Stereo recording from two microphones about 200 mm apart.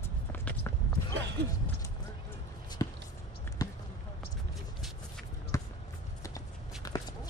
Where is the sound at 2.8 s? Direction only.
20° left (ahead or behind).